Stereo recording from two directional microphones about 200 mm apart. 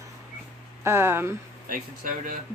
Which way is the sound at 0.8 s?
10° right (ahead or behind).